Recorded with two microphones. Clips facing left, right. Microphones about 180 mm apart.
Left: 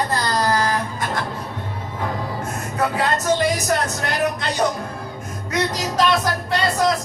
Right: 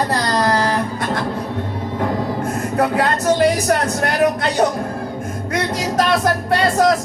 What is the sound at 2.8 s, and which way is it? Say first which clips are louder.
Music: right 3 dB; 60° right (ahead or behind).